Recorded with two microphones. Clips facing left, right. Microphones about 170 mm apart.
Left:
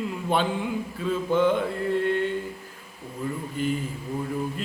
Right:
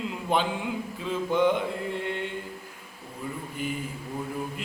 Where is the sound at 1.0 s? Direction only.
15° right (ahead or behind).